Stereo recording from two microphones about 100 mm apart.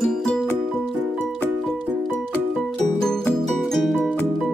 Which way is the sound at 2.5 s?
5° left (ahead or behind).